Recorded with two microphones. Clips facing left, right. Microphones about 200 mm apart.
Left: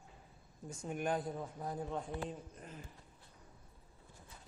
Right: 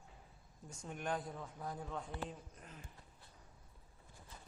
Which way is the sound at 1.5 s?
25° left (ahead or behind).